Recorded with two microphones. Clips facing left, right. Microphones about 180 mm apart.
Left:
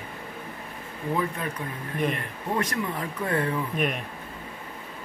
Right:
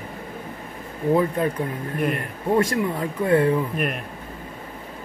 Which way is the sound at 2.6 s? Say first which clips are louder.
Right 5 dB; 25° right (ahead or behind).